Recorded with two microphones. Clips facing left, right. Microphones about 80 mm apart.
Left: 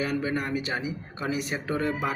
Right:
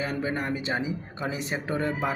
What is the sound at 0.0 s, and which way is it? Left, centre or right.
Speech, right.